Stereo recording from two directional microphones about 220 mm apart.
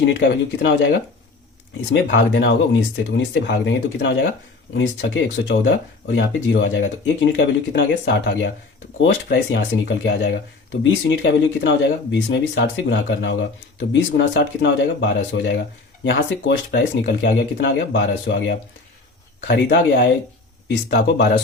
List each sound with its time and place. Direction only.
0.0 s speech: 55° left (ahead or behind)